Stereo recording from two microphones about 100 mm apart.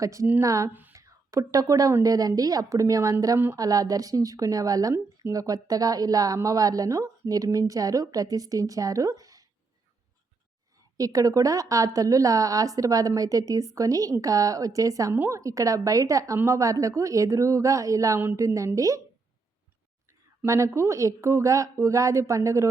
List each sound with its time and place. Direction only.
0.0 s a woman's voice: 30° right (ahead or behind)
0.7 s speech: 20° right (ahead or behind)
0.9 s a woman's voice: 30° right (ahead or behind)
10.9 s a woman's voice: 35° right (ahead or behind)
20.4 s a woman's voice: 30° right (ahead or behind)